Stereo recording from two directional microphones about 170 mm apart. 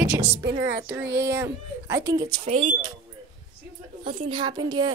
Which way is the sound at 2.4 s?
40° right (ahead or behind).